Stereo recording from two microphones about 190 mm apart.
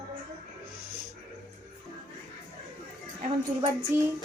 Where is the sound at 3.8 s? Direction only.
15° right (ahead or behind).